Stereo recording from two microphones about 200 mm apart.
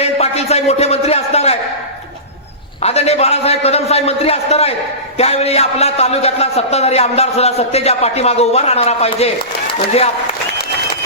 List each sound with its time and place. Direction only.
0.0 s a man's voice: 30° left (ahead or behind)
2.8 s a man's voice: 30° left (ahead or behind)